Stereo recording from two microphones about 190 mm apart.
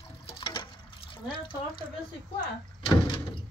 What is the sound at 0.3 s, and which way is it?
Water, 25° left (ahead or behind).